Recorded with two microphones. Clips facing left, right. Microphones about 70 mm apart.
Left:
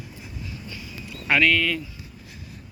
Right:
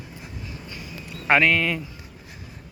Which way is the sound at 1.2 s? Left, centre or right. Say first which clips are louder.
Right 1 dB; right.